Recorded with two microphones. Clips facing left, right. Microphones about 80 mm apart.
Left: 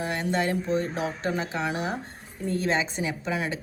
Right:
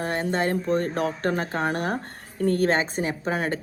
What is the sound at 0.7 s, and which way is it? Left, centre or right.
A woman's voice, right.